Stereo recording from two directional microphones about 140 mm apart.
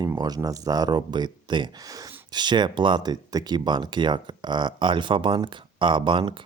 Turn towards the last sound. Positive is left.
turn(degrees=-35)  # may be behind; listen again after turning